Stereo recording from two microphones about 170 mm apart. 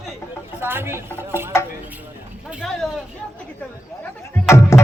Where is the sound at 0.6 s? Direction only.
15° right (ahead or behind).